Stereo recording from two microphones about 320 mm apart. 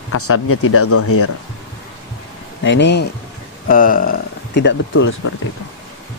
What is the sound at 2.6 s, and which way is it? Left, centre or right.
Speech, left.